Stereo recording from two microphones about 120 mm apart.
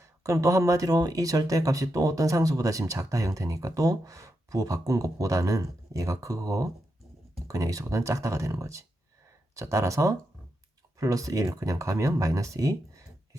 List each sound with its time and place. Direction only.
0.0 s speech: 25° right (ahead or behind)